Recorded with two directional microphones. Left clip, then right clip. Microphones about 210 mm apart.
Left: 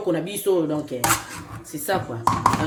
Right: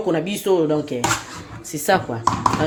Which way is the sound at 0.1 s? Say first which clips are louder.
Right 2 dB; 45° right (ahead or behind).